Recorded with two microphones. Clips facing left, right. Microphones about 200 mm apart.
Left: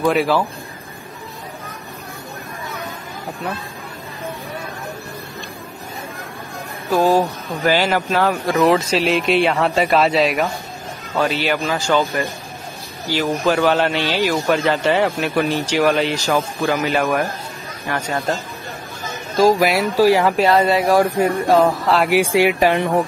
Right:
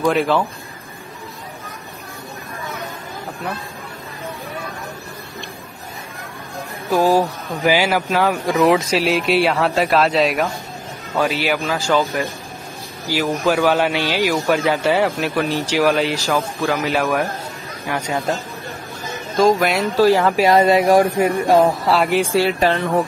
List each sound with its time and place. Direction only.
0.0 s a man's voice: centre (ahead or behind)
7.1 s speech: 10° right (ahead or behind)
9.0 s a man's voice: centre (ahead or behind)
17.9 s speech: 15° right (ahead or behind)
20.0 s speech: 10° left (ahead or behind)
20.3 s speech: 15° right (ahead or behind)
21.8 s a man's voice: centre (ahead or behind)
22.1 s speech: 15° left (ahead or behind)